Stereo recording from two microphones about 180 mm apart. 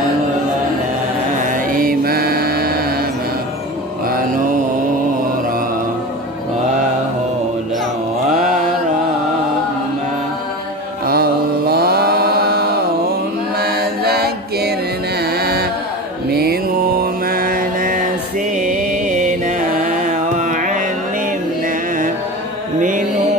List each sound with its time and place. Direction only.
1.4 s mantra: 50° right (ahead or behind)
11.1 s mantra: 60° right (ahead or behind)
13.6 s chant: 60° right (ahead or behind)
15.1 s music: 60° right (ahead or behind)
16.3 s mantra: 60° right (ahead or behind)
18.6 s music: 40° right (ahead or behind)